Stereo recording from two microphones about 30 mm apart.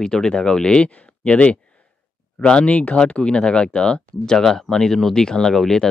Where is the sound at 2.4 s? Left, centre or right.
Left; by 5.8 s centre.